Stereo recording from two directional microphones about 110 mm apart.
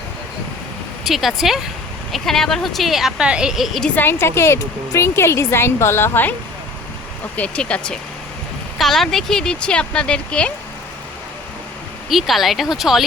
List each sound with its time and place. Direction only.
1.0 s a woman's voice: centre (ahead or behind)
3.8 s a woman's voice: 15° left (ahead or behind)
7.3 s speech: 10° left (ahead or behind)
12.0 s a woman's voice: centre (ahead or behind)